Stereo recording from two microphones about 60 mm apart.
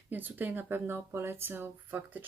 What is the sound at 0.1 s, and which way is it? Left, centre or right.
Speech, right.